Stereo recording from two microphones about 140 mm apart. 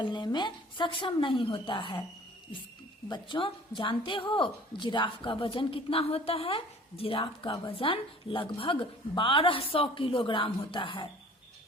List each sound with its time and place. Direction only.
0.0 s a woman's voice: 35° left (ahead or behind)
3.1 s a woman's voice: 35° left (ahead or behind)